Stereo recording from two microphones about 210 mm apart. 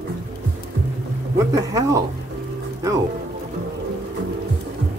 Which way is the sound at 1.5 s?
15° right (ahead or behind).